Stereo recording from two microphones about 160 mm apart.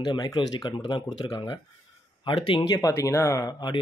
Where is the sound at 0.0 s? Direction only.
25° left (ahead or behind).